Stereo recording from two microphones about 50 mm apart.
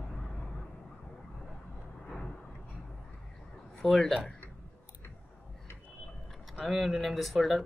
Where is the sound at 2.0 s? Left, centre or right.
Centre.